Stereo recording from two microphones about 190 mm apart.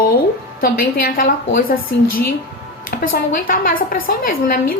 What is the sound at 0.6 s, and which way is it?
A woman's voice, 50° left (ahead or behind).